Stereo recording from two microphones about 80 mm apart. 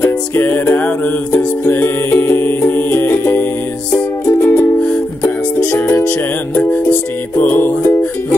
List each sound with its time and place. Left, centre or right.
0.0 s music: left
4.8 s music: centre
5.8 s music: left